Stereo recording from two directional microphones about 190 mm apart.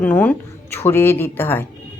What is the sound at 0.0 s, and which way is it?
Speech, 10° left (ahead or behind).